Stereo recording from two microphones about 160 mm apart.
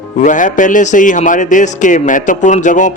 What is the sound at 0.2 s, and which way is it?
A man's voice, 55° left (ahead or behind).